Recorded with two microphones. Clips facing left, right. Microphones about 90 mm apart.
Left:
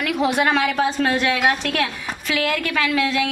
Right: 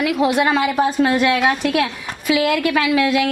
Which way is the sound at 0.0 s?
Centre (ahead or behind).